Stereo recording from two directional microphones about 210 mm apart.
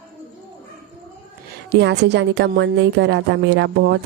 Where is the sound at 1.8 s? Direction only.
55° right (ahead or behind).